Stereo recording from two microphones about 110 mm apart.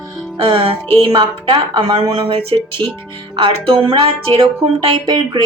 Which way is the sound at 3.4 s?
50° right (ahead or behind).